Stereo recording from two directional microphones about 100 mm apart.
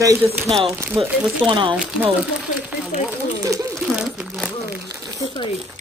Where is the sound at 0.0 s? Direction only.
35° right (ahead or behind).